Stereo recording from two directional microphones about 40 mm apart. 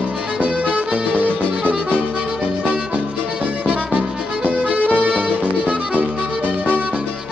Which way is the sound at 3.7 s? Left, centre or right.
Right.